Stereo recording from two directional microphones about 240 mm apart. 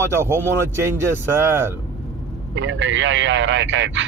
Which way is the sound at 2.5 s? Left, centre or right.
Right.